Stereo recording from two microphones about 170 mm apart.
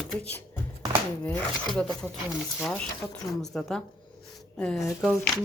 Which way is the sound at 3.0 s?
20° left (ahead or behind).